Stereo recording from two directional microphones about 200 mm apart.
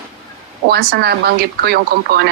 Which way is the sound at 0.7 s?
50° right (ahead or behind).